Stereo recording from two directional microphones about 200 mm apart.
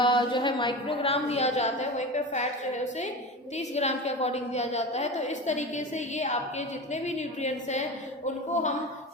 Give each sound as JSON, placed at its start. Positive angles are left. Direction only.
{"t": 0.0, "sound": "a woman's voice", "side_deg": 25}